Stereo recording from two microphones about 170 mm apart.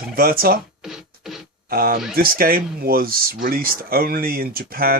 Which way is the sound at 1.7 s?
60° right (ahead or behind).